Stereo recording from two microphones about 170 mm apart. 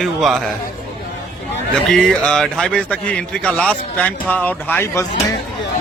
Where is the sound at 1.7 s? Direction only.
5° left (ahead or behind).